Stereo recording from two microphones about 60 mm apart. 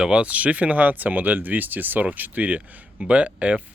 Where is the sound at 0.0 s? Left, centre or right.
Centre.